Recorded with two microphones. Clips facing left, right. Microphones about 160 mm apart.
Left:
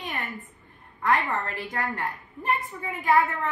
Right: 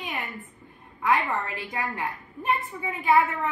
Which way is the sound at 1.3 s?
15° right (ahead or behind).